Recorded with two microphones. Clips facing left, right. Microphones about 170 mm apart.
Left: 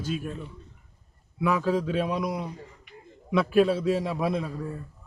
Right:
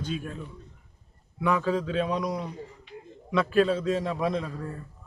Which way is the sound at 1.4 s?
5° left (ahead or behind).